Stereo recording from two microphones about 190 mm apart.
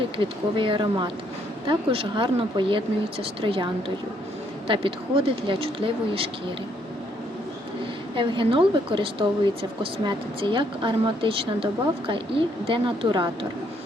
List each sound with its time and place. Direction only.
0.2 s speech: 25° right (ahead or behind)
4.7 s speech: 25° right (ahead or behind)
8.1 s speech: 25° right (ahead or behind)
10.4 s speech: 25° right (ahead or behind)